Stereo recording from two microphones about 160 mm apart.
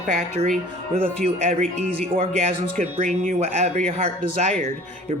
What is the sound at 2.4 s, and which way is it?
Speech, 45° right (ahead or behind).